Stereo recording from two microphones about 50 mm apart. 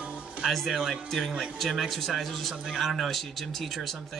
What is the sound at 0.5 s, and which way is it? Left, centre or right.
Speech, centre.